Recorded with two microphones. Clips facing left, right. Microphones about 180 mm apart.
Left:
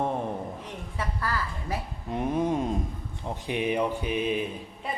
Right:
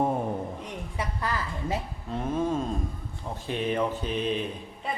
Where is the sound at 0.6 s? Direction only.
15° right (ahead or behind).